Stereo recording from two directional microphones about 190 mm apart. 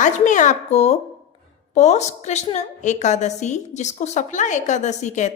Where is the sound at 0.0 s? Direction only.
40° left (ahead or behind).